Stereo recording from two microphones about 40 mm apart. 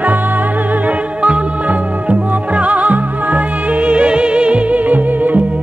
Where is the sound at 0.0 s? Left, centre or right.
Right.